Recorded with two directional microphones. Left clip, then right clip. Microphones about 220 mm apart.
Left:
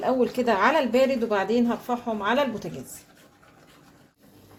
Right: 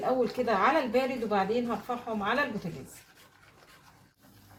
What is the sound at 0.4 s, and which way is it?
Speech, 55° left (ahead or behind).